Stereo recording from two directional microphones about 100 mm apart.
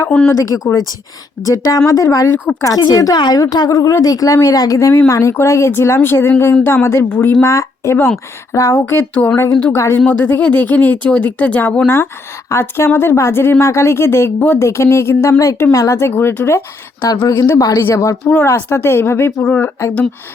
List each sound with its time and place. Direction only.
0.3 s speech: 35° left (ahead or behind)
10.1 s speech: 20° left (ahead or behind)
12.5 s speech: 25° left (ahead or behind)
16.0 s speech: 25° left (ahead or behind)
17.6 s speech: 35° left (ahead or behind)
19.4 s speech: 10° left (ahead or behind)